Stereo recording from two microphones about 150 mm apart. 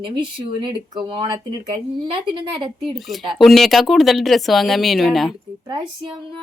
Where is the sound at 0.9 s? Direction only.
35° right (ahead or behind).